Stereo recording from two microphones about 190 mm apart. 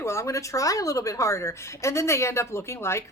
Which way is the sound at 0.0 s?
15° left (ahead or behind).